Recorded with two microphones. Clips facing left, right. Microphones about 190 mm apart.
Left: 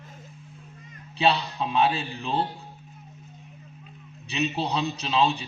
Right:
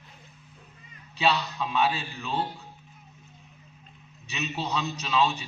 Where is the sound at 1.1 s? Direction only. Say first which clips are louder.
Left 2 dB; 30° left (ahead or behind).